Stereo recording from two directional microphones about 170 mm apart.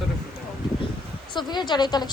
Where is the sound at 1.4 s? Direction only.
25° left (ahead or behind).